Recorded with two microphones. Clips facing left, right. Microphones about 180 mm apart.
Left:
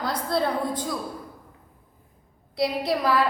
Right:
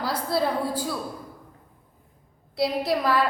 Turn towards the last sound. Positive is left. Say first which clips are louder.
# even
turn(degrees=0)  # may be behind; listen again after turning